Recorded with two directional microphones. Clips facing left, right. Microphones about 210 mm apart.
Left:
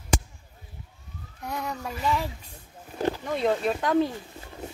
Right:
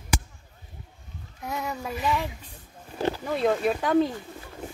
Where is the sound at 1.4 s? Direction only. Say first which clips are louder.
Right 1 dB; 5° right (ahead or behind).